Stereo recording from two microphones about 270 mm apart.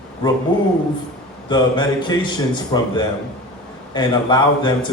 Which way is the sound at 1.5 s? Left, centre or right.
Centre.